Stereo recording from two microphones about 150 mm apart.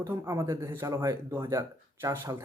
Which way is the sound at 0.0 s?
20° right (ahead or behind).